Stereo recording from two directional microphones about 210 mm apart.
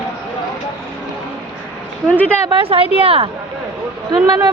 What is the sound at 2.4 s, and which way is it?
Speech, 25° right (ahead or behind).